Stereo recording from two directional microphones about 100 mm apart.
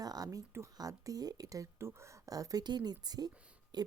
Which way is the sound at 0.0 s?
40° right (ahead or behind).